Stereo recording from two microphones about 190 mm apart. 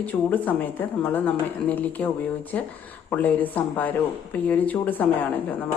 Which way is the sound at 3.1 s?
10° left (ahead or behind).